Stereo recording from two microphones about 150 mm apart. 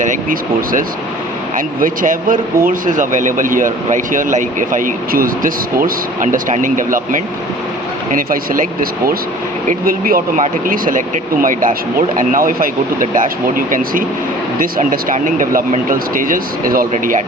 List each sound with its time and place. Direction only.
0.0 s speech: 60° right (ahead or behind)
16.9 s speech: 50° right (ahead or behind)